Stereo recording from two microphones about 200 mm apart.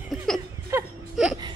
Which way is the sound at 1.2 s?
5° right (ahead or behind).